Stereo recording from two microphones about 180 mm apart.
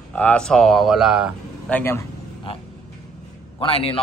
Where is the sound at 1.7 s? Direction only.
10° left (ahead or behind).